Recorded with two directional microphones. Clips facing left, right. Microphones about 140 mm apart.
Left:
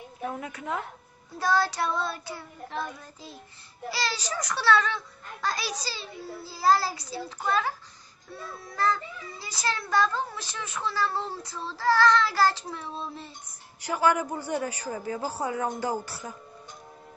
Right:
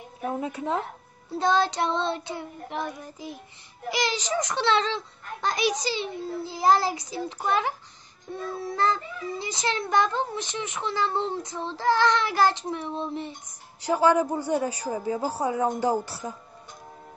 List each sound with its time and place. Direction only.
0.2 s a child's voice: 25° right (ahead or behind)